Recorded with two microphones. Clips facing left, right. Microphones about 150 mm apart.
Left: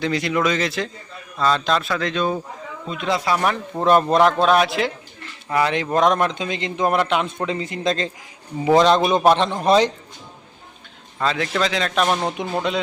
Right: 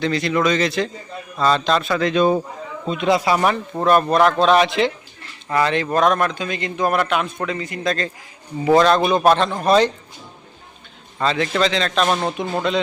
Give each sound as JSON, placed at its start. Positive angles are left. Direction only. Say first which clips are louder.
{"t": 0.0, "sound": "a man's voice", "louder": "right 2 dB", "side_deg": 10}
{"t": 2.8, "sound": "a man's voice", "louder": "right 6 dB", "side_deg": -25}
{"t": 3.1, "sound": "speech", "louder": "right 3 dB", "side_deg": -10}
{"t": 3.8, "sound": "a man's voice", "louder": "even", "side_deg": 20}
{"t": 4.4, "sound": "a man's voice", "louder": "right 2 dB", "side_deg": 5}
{"t": 11.2, "sound": "a man's voice", "louder": "right 2 dB", "side_deg": 0}